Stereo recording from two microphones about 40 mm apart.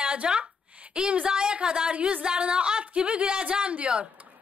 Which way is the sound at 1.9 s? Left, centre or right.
Right.